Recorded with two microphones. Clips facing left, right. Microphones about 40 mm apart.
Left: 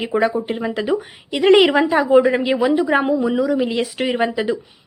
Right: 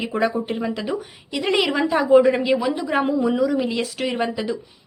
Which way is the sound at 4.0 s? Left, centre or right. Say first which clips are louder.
Left 4 dB; centre.